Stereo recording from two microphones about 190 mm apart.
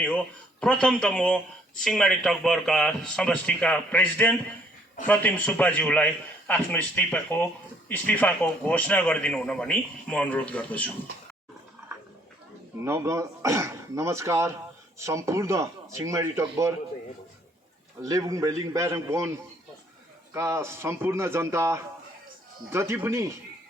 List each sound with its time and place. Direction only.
0.6 s a man's voice: 5° left (ahead or behind)
12.8 s speech: 15° right (ahead or behind)
18.0 s speech: 15° right (ahead or behind)
20.3 s speech: 15° right (ahead or behind)